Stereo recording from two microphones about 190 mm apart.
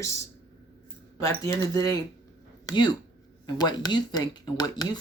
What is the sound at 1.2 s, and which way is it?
Speech, 20° left (ahead or behind).